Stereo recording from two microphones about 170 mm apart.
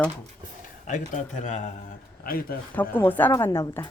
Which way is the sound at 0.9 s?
45° left (ahead or behind).